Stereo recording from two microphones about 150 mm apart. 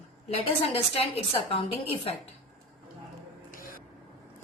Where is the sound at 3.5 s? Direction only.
70° left (ahead or behind).